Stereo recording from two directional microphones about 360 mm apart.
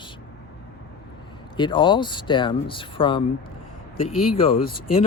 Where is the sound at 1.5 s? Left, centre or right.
Centre.